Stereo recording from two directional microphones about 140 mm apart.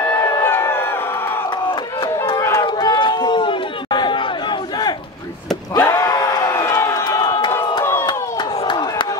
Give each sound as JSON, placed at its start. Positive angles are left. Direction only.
{"t": 0.2, "sound": "crowd", "side_deg": 20}
{"t": 2.6, "sound": "chatter", "side_deg": 35}
{"t": 5.8, "sound": "crowd", "side_deg": 20}
{"t": 7.8, "sound": "crowd", "side_deg": 20}
{"t": 8.1, "sound": "a sound", "side_deg": 35}